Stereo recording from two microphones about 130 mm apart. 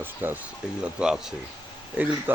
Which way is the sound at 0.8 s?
5° right (ahead or behind).